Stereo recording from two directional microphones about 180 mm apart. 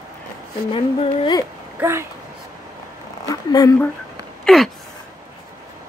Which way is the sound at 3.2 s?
20° left (ahead or behind).